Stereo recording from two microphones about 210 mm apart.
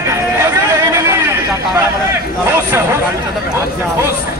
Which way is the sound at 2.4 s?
10° right (ahead or behind).